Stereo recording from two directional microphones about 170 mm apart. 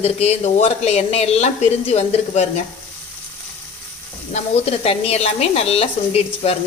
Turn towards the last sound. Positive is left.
turn(degrees=35)  # may be behind; listen again after turning